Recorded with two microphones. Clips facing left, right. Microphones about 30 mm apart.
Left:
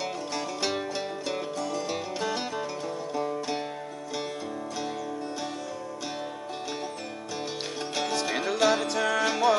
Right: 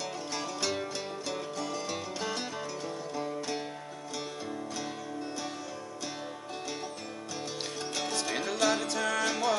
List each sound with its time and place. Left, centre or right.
0.6 s music: centre
1.6 s music: centre
3.2 s music: centre
7.9 s music: centre